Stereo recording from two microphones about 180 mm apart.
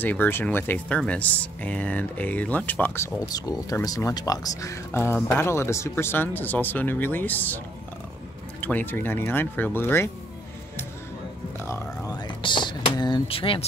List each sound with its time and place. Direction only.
0.0 s speech: 10° left (ahead or behind)
11.6 s a sound: 15° left (ahead or behind)
12.4 s speech: 25° left (ahead or behind)